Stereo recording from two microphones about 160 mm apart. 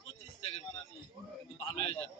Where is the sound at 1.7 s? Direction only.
35° left (ahead or behind).